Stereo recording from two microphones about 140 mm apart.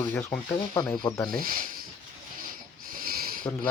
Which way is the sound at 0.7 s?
25° left (ahead or behind).